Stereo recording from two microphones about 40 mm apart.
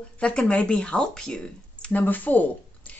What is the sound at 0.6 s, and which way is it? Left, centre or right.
Speech, left.